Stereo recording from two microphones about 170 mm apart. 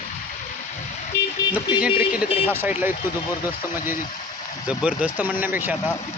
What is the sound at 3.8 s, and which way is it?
Speech, 55° left (ahead or behind).